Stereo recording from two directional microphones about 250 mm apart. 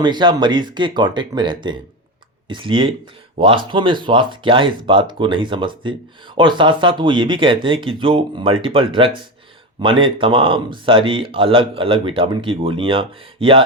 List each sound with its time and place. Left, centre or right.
0.0 s speech: centre